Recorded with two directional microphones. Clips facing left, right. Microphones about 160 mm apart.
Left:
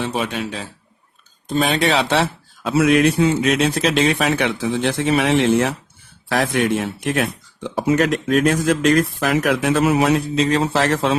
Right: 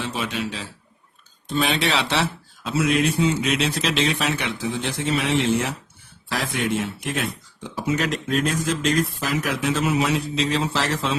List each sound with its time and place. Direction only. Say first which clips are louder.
0.0 s speech: left 4 dB; 55° left (ahead or behind)